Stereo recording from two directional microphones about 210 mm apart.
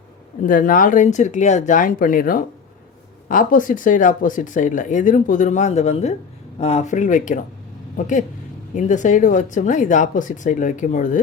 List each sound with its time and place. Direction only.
0.4 s speech: 40° left (ahead or behind)